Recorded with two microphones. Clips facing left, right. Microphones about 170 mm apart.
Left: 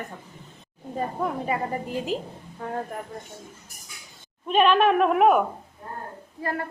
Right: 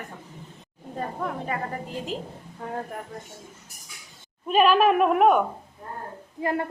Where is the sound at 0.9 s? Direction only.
10° left (ahead or behind).